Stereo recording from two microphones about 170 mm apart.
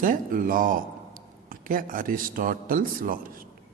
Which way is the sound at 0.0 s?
55° right (ahead or behind).